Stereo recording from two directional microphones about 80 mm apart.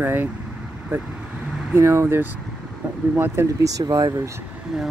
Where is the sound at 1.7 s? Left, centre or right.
Right.